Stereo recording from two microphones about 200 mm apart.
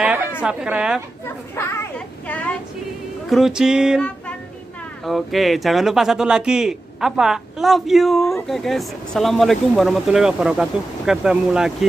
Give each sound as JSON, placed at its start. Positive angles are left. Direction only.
{"t": 0.4, "sound": "speech", "side_deg": -5}
{"t": 1.2, "sound": "a child's voice", "side_deg": 10}
{"t": 3.3, "sound": "music", "side_deg": 0}
{"t": 5.0, "sound": "speech", "side_deg": 0}